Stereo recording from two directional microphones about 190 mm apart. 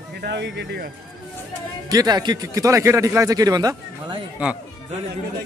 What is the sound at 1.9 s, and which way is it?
Speech, 20° right (ahead or behind).